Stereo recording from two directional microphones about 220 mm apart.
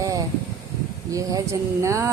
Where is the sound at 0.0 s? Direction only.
15° right (ahead or behind).